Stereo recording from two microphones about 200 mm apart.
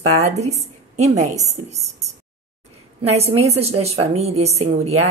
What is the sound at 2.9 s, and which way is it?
Speech, 30° right (ahead or behind).